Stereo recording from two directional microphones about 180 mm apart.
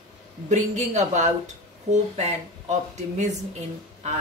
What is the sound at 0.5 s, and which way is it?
A woman's voice, 40° right (ahead or behind).